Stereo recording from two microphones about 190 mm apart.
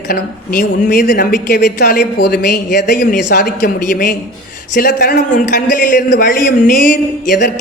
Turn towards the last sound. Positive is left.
turn(degrees=45)  # may be behind; listen again after turning